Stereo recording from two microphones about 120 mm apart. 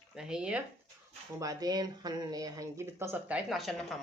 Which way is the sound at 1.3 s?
30° right (ahead or behind).